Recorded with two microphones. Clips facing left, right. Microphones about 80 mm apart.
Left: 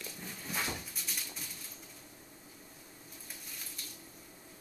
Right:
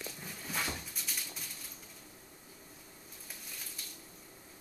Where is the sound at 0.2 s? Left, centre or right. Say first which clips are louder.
Left 1 dB; centre.